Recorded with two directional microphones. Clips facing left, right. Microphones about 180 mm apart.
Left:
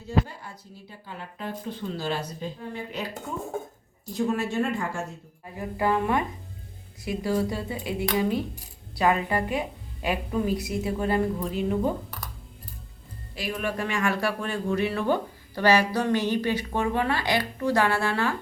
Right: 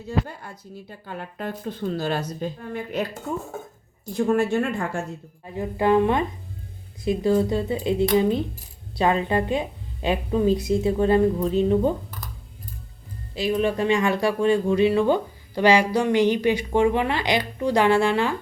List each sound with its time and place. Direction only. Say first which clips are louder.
0.3 s speech: right 4 dB; 50° right (ahead or behind)
4.1 s speech: right 5 dB; 55° right (ahead or behind)
5.5 s a woman's voice: right 6 dB; 25° right (ahead or behind)
13.3 s speech: right 8 dB; 25° right (ahead or behind)